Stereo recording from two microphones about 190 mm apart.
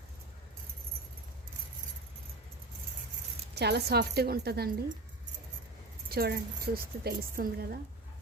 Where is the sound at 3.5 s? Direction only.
60° right (ahead or behind).